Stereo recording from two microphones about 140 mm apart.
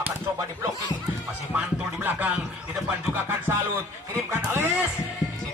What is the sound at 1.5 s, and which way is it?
Music, 15° right (ahead or behind).